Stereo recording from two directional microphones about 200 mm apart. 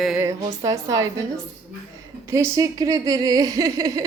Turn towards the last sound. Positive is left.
turn(degrees=-15)  # may be behind; listen again after turning